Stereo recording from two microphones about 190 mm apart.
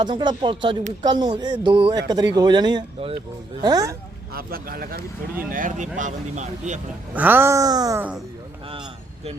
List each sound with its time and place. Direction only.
0.0 s speech: 25° right (ahead or behind)
4.4 s a man's voice: 50° right (ahead or behind)
7.1 s speech: 10° right (ahead or behind)
8.7 s a sound: 30° right (ahead or behind)